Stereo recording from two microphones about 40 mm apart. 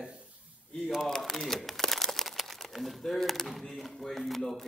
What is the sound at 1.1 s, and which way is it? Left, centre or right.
Crumpling, centre.